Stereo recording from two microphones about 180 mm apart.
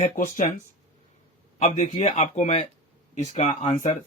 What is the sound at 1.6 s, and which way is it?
Speech, 40° left (ahead or behind).